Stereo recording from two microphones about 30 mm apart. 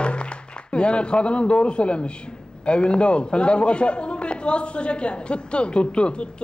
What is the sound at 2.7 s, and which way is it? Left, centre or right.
A woman's voice, left.